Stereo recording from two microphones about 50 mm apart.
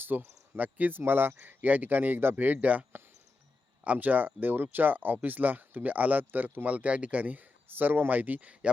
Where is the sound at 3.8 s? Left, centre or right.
Right.